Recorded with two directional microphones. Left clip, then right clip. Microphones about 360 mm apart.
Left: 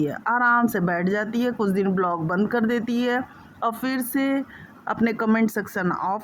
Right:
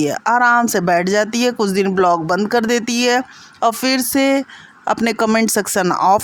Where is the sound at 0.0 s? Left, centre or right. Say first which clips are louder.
Right 7 dB; left.